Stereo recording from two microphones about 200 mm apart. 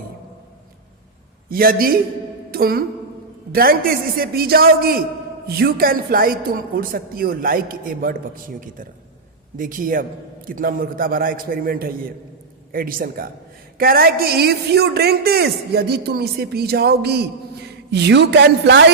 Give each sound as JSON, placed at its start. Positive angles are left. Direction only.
{"t": 1.5, "sound": "a man's voice", "side_deg": -45}
{"t": 9.6, "sound": "a man's voice", "side_deg": -40}